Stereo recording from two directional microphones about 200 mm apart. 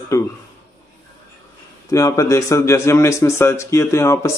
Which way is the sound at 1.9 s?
15° left (ahead or behind).